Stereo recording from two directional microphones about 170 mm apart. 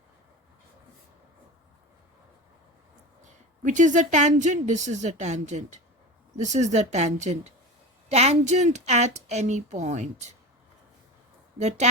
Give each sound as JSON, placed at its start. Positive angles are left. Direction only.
{"t": 3.6, "sound": "a woman's voice", "side_deg": -45}